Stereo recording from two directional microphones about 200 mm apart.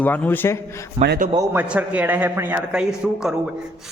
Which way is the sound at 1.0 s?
50° right (ahead or behind).